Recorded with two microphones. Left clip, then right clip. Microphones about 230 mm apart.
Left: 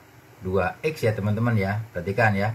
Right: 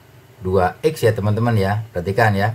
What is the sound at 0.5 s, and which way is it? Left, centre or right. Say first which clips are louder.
Speech: right 7 dB; right.